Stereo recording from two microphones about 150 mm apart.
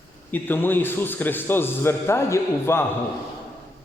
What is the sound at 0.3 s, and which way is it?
A man's voice, 15° left (ahead or behind).